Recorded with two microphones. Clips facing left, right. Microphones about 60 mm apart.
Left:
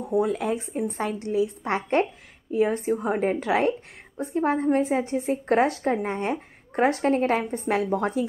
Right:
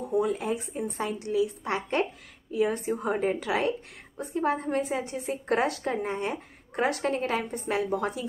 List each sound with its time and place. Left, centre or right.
0.2 s a woman's voice: left